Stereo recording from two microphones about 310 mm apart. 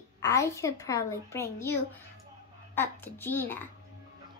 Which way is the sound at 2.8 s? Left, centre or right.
Centre.